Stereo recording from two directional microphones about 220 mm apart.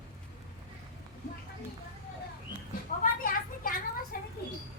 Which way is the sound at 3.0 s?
40° left (ahead or behind).